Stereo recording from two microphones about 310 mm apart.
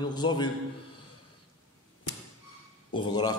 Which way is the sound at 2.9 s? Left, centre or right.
Centre.